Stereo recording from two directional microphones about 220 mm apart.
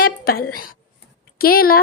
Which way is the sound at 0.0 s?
45° left (ahead or behind).